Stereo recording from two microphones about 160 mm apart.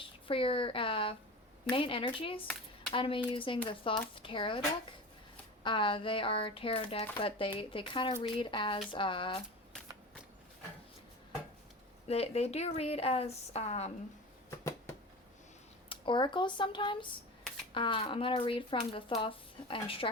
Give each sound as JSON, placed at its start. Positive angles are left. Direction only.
{"t": 0.0, "sound": "speech", "side_deg": 35}
{"t": 5.6, "sound": "speech", "side_deg": 30}
{"t": 12.0, "sound": "speech", "side_deg": 40}
{"t": 15.9, "sound": "speech", "side_deg": 30}